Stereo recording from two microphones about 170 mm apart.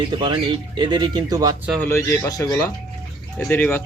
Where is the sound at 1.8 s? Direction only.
15° left (ahead or behind).